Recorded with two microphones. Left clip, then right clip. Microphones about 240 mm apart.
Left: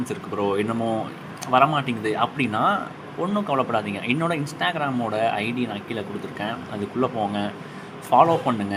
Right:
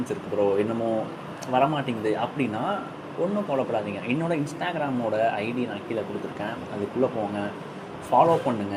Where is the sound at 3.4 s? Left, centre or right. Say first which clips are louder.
Left 3 dB; centre.